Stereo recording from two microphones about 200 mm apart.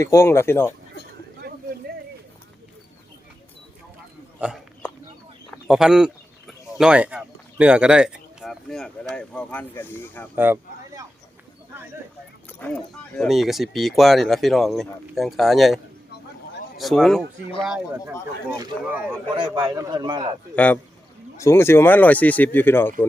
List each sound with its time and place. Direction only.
0.0 s speech: 15° left (ahead or behind)
1.5 s a sound: 55° right (ahead or behind)
5.5 s chicken: centre (ahead or behind)
6.5 s speech: 5° right (ahead or behind)
10.3 s a sound: 10° right (ahead or behind)
12.5 s speech: 10° left (ahead or behind); by 19.1 s 10° right (ahead or behind)
19.4 s a man's voice: 20° right (ahead or behind)
20.6 s speech: 10° left (ahead or behind)